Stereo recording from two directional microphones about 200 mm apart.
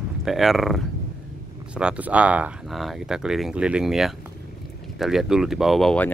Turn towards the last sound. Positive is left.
turn(degrees=5)  # may be behind; listen again after turning